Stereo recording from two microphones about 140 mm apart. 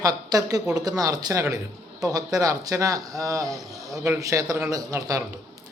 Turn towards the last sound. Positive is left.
turn(degrees=-25)  # may be behind; listen again after turning